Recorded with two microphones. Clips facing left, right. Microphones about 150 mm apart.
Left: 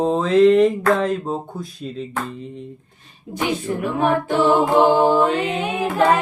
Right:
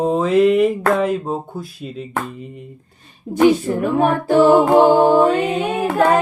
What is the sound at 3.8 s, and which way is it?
A capella, 45° right (ahead or behind).